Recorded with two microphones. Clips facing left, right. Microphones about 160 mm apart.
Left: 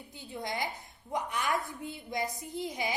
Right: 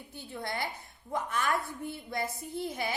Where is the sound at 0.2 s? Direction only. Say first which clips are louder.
Even; 15° left (ahead or behind).